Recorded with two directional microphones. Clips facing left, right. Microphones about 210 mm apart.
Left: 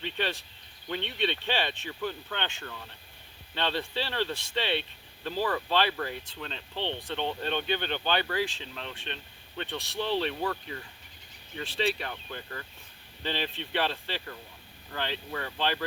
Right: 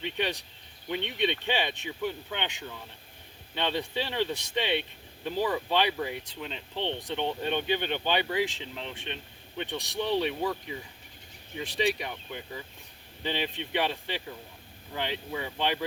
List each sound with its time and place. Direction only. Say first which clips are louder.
0.0 s speech: right 1 dB; 15° right (ahead or behind)